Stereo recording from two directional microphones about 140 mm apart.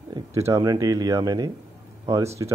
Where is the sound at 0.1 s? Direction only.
20° right (ahead or behind).